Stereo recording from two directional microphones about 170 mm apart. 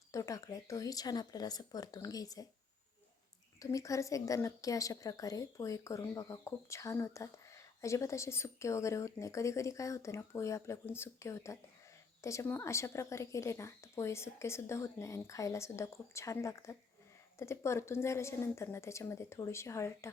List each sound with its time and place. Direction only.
0.1 s speech: 20° left (ahead or behind)
3.6 s a woman's voice: 20° left (ahead or behind)